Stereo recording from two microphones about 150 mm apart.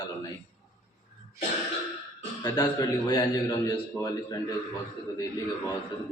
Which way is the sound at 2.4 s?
25° left (ahead or behind).